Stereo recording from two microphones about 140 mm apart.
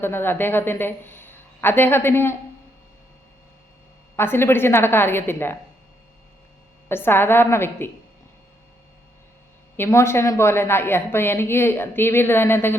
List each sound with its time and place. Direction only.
0.0 s a woman's voice: 15° left (ahead or behind)
4.2 s a woman's voice: 15° left (ahead or behind)
6.8 s a woman's voice: 15° left (ahead or behind)
9.7 s a woman's voice: 20° left (ahead or behind)